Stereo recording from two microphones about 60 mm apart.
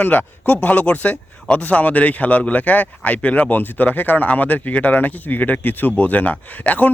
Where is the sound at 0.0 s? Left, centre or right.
Left.